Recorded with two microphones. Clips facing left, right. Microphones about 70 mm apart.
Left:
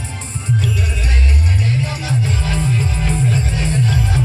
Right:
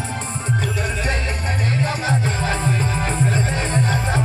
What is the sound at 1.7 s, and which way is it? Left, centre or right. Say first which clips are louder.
Music: even; right.